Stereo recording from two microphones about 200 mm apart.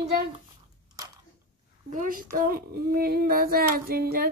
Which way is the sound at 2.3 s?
45° right (ahead or behind).